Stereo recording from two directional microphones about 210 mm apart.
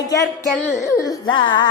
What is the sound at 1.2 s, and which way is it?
Speech, 20° left (ahead or behind).